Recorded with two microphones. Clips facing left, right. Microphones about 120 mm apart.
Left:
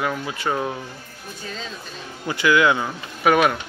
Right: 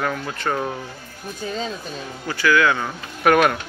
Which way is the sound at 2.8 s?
5° left (ahead or behind).